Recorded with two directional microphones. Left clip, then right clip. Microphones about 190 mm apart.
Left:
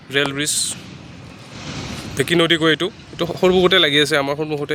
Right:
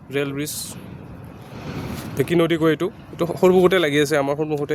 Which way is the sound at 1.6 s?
60° right (ahead or behind).